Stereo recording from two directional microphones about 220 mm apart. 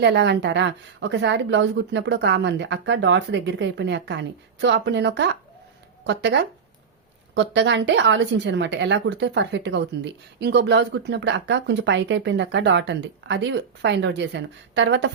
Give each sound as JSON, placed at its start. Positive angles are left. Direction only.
{"t": 0.0, "sound": "a woman's voice", "side_deg": -50}